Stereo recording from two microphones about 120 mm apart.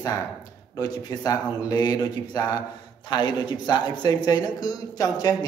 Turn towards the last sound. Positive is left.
turn(degrees=30)  # may be behind; listen again after turning